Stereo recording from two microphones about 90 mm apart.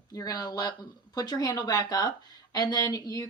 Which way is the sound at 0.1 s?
40° left (ahead or behind).